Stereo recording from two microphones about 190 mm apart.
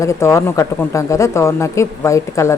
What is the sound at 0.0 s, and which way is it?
Speech, 15° left (ahead or behind).